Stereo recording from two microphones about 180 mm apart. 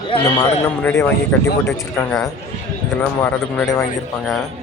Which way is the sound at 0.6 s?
10° left (ahead or behind).